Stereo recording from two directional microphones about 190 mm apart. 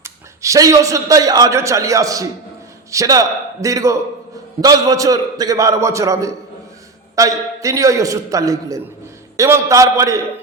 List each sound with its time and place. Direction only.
0.0 s a man's voice: 15° right (ahead or behind)